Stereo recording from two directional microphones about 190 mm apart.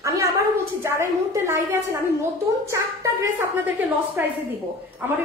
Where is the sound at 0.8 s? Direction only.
15° right (ahead or behind).